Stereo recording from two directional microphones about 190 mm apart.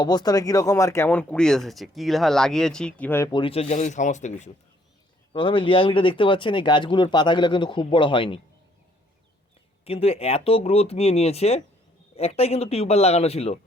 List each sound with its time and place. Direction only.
0.0 s speech: 20° left (ahead or behind)
3.3 s speech: 30° left (ahead or behind)
5.3 s speech: 25° left (ahead or behind)
9.8 s speech: 30° left (ahead or behind)